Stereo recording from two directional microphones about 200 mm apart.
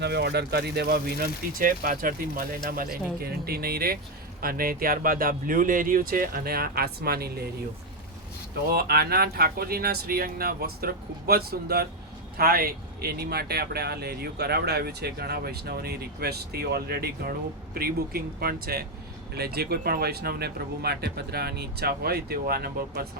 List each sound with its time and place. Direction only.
0.0 s speech: 55° right (ahead or behind)
8.7 s speech: 50° right (ahead or behind)